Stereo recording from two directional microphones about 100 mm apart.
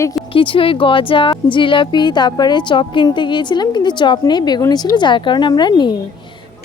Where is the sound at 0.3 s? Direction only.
60° left (ahead or behind).